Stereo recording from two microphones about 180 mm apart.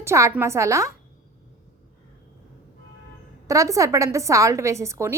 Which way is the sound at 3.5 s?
15° right (ahead or behind).